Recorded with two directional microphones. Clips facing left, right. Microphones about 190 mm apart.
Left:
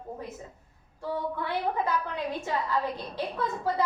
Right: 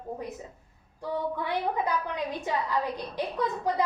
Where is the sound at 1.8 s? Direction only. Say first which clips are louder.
Even; 15° right (ahead or behind).